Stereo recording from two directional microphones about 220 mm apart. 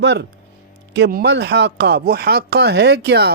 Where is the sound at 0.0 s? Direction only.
55° right (ahead or behind).